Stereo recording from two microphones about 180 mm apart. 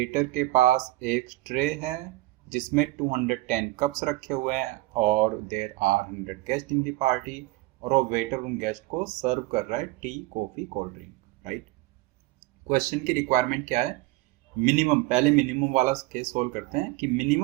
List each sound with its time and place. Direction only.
0.0 s speech: 45° right (ahead or behind)
12.9 s speech: 45° right (ahead or behind)